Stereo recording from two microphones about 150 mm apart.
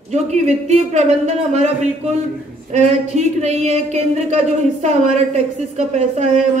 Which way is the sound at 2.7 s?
50° right (ahead or behind).